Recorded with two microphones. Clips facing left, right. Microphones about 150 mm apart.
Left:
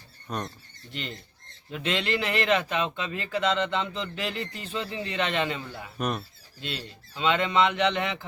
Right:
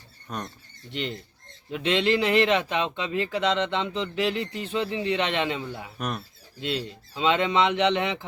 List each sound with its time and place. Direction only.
0.3 s speech: centre (ahead or behind)
0.9 s speech: 20° right (ahead or behind)
6.0 s speech: centre (ahead or behind)
6.6 s speech: 20° right (ahead or behind)